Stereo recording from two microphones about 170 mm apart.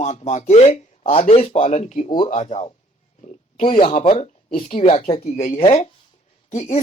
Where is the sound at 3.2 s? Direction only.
45° left (ahead or behind).